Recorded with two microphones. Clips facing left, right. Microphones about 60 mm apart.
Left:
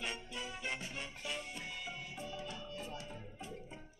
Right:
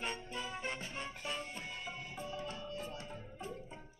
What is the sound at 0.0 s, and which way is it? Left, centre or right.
Music, right.